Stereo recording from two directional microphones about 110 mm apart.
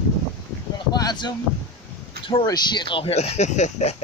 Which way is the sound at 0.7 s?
40° left (ahead or behind).